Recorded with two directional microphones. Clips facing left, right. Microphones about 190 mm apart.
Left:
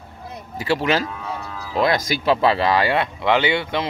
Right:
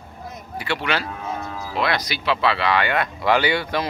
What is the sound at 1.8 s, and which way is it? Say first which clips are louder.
Speech: left 5 dB; 40° left (ahead or behind).